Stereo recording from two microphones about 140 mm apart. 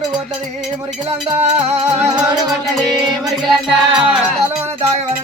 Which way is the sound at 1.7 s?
50° right (ahead or behind).